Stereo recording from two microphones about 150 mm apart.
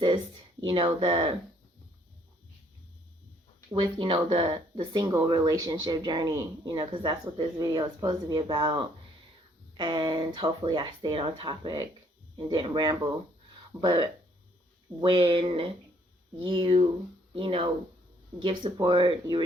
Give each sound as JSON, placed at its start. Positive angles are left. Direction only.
{"t": 0.6, "sound": "speech", "side_deg": -35}
{"t": 3.7, "sound": "speech", "side_deg": -35}